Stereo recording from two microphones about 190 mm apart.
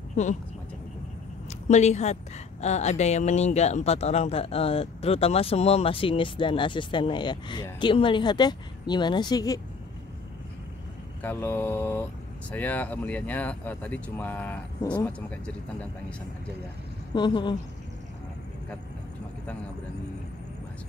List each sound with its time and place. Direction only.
0.1 s speech: 40° left (ahead or behind)
1.7 s speech: 35° left (ahead or behind); by 9.6 s 20° left (ahead or behind)
11.2 s speech: 10° left (ahead or behind)
17.1 s speech: 25° left (ahead or behind)